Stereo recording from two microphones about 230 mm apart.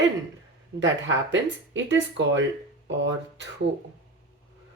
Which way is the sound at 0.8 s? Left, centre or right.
Right.